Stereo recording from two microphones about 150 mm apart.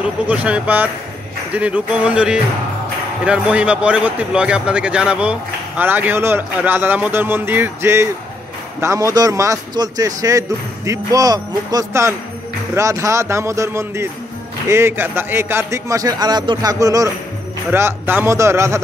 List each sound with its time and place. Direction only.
0.0 s a man's voice: 10° right (ahead or behind)